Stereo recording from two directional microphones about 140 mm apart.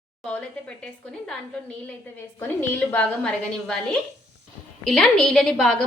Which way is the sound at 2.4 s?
15° left (ahead or behind).